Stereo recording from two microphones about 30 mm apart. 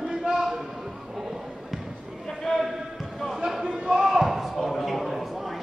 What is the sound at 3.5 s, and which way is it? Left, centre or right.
Basketball bounce, centre.